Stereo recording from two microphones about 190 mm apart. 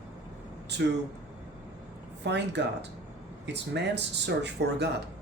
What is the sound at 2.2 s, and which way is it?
Speech, 65° right (ahead or behind).